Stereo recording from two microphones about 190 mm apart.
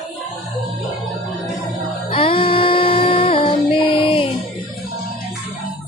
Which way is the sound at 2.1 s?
30° left (ahead or behind).